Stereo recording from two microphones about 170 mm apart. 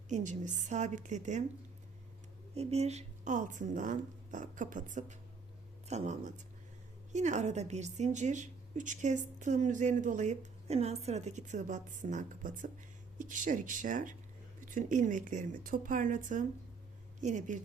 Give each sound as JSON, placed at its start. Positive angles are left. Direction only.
{"t": 0.1, "sound": "a woman's voice", "side_deg": -45}
{"t": 2.6, "sound": "a woman's voice", "side_deg": -40}